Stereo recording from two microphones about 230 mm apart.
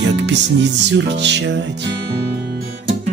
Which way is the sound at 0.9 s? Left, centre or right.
Right.